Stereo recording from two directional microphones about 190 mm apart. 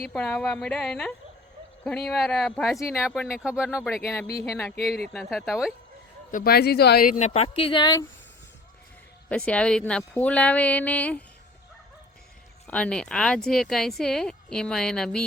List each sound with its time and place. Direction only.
0.0 s speech: 5° left (ahead or behind)
2.7 s a woman's voice: 15° left (ahead or behind)
3.3 s speech: 5° right (ahead or behind)
4.3 s speech: 20° left (ahead or behind)
4.5 s a woman's voice: 5° left (ahead or behind)
6.3 s speech: 55° left (ahead or behind); by 8.0 s 20° left (ahead or behind)
9.3 s a woman's voice: 5° left (ahead or behind)
12.6 s speech: 5° left (ahead or behind)